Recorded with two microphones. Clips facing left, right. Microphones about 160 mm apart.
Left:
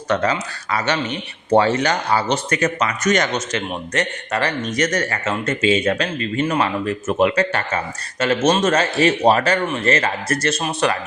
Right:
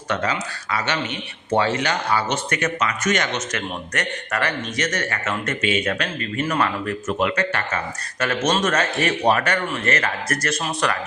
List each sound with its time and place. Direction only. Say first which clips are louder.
0.1 s a man's voice: left 4 dB; 40° left (ahead or behind); by 10.9 s 25° left (ahead or behind)